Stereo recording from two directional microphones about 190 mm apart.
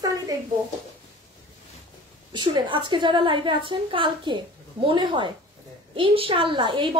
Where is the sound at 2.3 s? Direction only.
25° right (ahead or behind).